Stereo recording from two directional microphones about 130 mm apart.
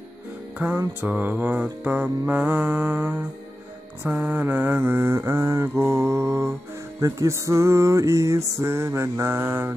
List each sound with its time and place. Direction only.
0.6 s mantra: 10° right (ahead or behind)
7.0 s music: 20° right (ahead or behind)